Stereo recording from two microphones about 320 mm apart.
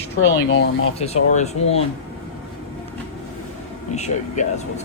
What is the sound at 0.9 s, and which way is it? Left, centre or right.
Speech, centre.